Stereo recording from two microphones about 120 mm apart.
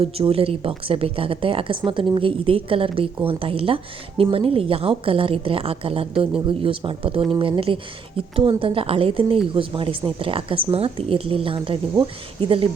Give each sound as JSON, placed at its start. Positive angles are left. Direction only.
{"t": 0.0, "sound": "a woman's voice", "side_deg": -55}